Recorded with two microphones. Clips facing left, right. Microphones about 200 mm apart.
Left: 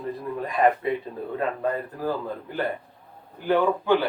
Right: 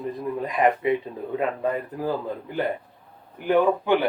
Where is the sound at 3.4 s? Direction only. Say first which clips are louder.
Right 2 dB; 15° right (ahead or behind).